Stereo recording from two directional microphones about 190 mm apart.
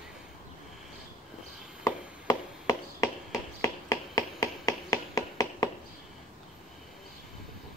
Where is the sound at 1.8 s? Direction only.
15° left (ahead or behind).